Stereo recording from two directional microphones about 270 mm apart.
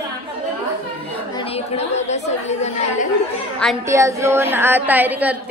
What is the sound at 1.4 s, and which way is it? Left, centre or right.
Speech, left.